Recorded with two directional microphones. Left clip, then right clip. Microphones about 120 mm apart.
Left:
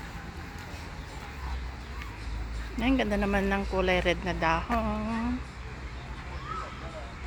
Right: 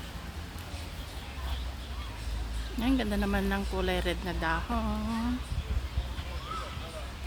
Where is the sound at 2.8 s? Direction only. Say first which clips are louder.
Left 3 dB; 20° right (ahead or behind).